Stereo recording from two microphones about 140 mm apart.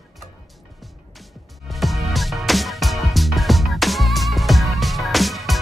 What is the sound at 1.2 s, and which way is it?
Music, centre (ahead or behind).